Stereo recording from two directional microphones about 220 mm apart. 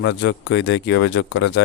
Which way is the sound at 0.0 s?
55° left (ahead or behind).